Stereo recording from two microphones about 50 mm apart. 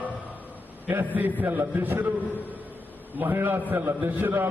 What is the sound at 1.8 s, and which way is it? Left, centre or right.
Speech, right.